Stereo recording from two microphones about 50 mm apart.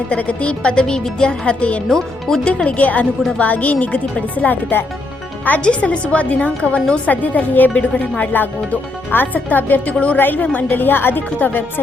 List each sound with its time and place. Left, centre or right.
0.1 s a woman's voice: left
1.9 s speech: centre
2.4 s a woman's voice: left
5.5 s a woman's voice: left
7.1 s a woman's voice: left
8.2 s a woman's voice: left
10.2 s a woman's voice: left